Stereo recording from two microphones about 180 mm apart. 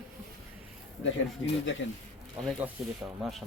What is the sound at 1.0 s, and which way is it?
Speech, 90° left.